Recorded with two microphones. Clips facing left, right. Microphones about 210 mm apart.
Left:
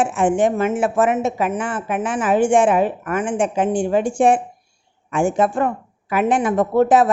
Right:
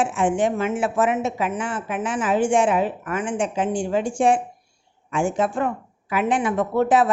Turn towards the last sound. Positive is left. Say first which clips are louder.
# left 4 dB
turn(degrees=45)  # may be behind; listen again after turning